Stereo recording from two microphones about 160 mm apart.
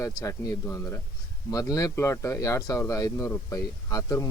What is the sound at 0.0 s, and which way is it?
Speech, 20° left (ahead or behind).